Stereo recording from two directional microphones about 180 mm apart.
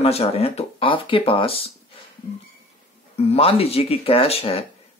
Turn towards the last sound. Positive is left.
turn(degrees=35)  # may be behind; listen again after turning